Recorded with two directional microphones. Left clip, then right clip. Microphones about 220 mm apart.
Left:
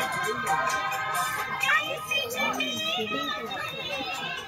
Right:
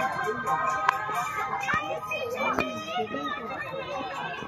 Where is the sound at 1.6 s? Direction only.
35° left (ahead or behind).